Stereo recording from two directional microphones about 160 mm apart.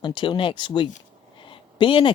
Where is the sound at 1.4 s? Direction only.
30° left (ahead or behind).